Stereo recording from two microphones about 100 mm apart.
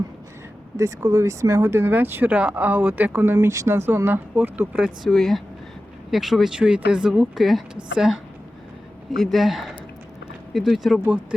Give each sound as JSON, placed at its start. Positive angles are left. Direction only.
{"t": 0.8, "sound": "speech", "side_deg": -30}
{"t": 5.0, "sound": "speech", "side_deg": 0}
{"t": 11.0, "sound": "speech", "side_deg": -15}